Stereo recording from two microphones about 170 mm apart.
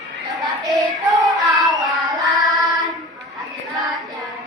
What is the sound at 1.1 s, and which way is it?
Child singing, 25° right (ahead or behind).